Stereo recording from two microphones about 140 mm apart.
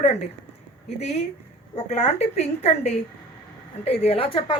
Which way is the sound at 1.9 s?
50° left (ahead or behind).